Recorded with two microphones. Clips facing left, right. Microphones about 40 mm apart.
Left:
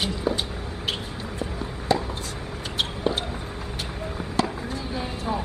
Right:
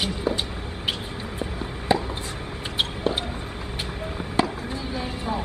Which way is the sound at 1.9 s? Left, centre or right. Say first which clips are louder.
Right 1 dB; right.